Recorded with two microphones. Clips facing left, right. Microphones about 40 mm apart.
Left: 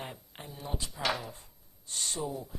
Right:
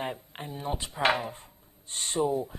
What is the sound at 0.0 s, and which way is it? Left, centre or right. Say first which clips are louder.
Speech: right 8 dB; right.